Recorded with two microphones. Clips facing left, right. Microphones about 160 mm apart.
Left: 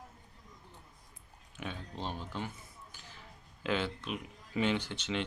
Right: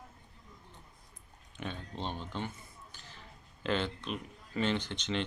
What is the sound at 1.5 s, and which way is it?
Speech, 5° left (ahead or behind).